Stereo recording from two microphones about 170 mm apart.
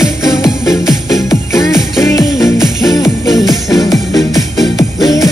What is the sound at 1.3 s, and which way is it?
Music, 25° left (ahead or behind).